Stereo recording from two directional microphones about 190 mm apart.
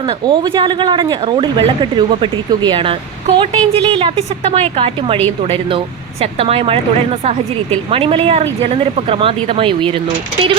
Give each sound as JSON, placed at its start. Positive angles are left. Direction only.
{"t": 0.3, "sound": "a woman's voice", "side_deg": -25}
{"t": 6.4, "sound": "a woman's voice", "side_deg": -30}